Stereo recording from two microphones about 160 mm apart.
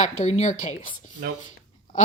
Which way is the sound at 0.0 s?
45° left (ahead or behind).